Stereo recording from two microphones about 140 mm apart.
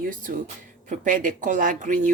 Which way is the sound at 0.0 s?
75° right (ahead or behind).